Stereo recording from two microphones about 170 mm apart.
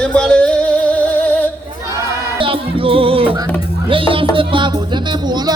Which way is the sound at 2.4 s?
30° right (ahead or behind).